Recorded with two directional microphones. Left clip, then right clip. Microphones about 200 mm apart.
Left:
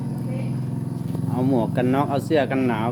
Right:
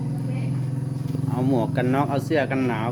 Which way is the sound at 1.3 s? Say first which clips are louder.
Left 1 dB; centre (ahead or behind).